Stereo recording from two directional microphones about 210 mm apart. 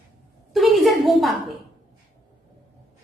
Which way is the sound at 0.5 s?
Centre (ahead or behind).